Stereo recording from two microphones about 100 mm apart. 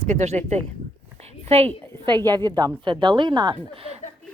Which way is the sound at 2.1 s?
45° right (ahead or behind).